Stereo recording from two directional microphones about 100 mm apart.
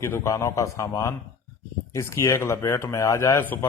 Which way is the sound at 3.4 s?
20° left (ahead or behind).